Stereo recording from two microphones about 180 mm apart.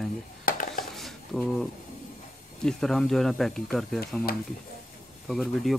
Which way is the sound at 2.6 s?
Centre (ahead or behind).